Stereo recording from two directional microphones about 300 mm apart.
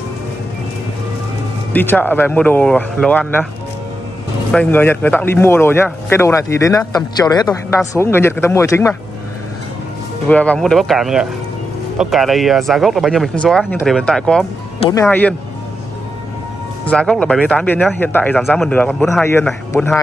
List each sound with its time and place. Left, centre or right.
1.7 s speech: centre
4.5 s a man's voice: centre
10.2 s a man's voice: centre
16.8 s speech: centre